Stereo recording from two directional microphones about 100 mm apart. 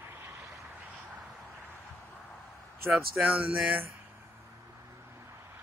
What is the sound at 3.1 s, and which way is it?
Speech, 15° right (ahead or behind).